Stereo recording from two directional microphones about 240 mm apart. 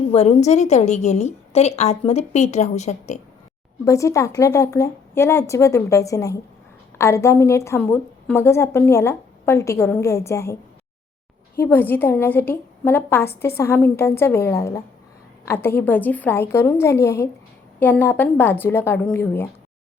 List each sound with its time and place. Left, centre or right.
0.1 s a woman's voice: left
3.8 s a woman's voice: centre
11.6 s a woman's voice: centre